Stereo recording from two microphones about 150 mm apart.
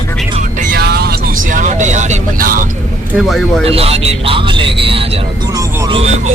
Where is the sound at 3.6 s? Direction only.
40° right (ahead or behind).